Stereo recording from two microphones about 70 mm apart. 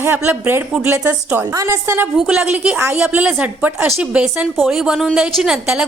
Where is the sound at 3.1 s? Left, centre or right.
Right.